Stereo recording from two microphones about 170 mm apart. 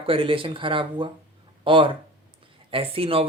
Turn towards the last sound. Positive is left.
turn(degrees=-30)  # may be behind; listen again after turning